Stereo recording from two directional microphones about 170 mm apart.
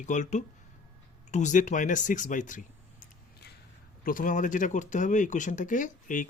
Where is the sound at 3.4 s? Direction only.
75° left (ahead or behind).